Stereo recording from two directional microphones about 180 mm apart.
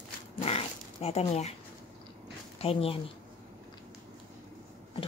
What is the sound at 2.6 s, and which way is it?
Speech, 30° left (ahead or behind).